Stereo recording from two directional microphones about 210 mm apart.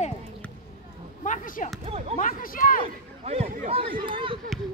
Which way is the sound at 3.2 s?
30° right (ahead or behind).